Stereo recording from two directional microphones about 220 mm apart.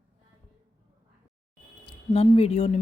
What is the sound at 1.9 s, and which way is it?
Speech, 25° left (ahead or behind).